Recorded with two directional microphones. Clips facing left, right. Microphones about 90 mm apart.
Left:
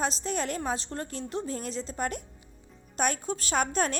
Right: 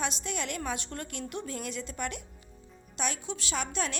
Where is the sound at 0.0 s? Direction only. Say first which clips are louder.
Left 4 dB; 35° left (ahead or behind).